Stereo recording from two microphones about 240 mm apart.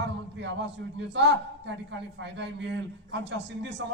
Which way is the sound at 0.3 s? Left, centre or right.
Right.